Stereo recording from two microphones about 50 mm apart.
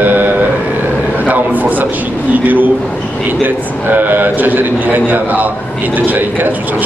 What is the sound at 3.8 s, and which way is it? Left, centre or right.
A man's voice, right.